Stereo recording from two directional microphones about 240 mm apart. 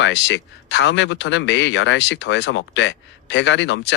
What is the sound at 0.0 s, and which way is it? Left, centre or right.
A man's voice, left.